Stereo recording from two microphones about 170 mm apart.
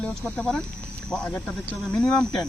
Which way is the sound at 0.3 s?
5° left (ahead or behind).